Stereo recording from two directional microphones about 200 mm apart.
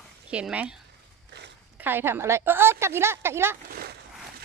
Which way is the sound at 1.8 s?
10° right (ahead or behind).